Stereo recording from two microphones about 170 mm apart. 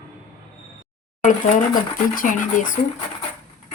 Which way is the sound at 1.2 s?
50° left (ahead or behind).